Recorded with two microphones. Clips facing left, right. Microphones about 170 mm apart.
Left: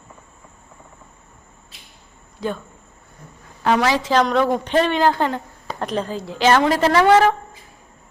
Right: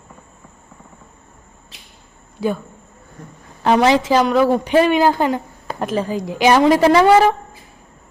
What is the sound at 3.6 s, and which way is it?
Speech, 25° right (ahead or behind).